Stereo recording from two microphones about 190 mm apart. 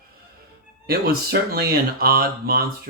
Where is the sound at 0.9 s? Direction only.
55° right (ahead or behind).